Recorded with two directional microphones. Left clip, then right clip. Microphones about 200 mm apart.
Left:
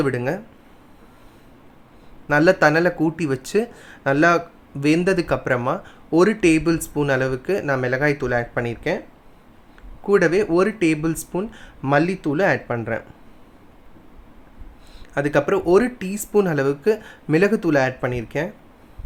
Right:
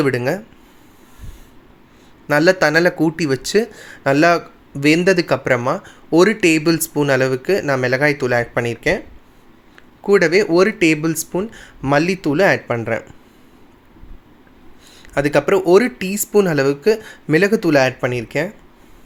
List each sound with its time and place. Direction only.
0.0 s speech: 10° right (ahead or behind)
2.2 s speech: 10° right (ahead or behind)
10.1 s speech: 5° right (ahead or behind)
15.1 s speech: 10° right (ahead or behind)